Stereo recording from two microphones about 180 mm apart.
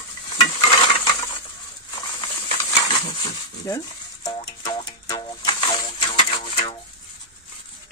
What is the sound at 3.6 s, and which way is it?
Stir, 20° left (ahead or behind).